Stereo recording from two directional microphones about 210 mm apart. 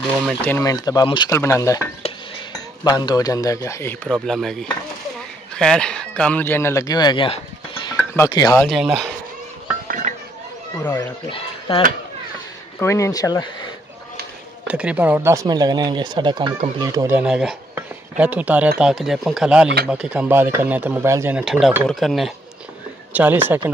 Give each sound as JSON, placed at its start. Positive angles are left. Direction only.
{"t": 0.5, "sound": "a man's voice", "side_deg": 15}
{"t": 8.6, "sound": "speech", "side_deg": 0}
{"t": 9.8, "sound": "dishes", "side_deg": -40}
{"t": 11.0, "sound": "speech", "side_deg": 25}
{"t": 12.7, "sound": "a man's voice", "side_deg": 15}
{"t": 14.7, "sound": "speech", "side_deg": -5}
{"t": 17.2, "sound": "speech", "side_deg": -5}
{"t": 17.7, "sound": "cutlery", "side_deg": -5}
{"t": 18.8, "sound": "speech", "side_deg": 0}